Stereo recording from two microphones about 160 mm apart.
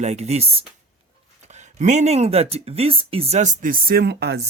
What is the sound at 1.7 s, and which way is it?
Speech, 45° right (ahead or behind).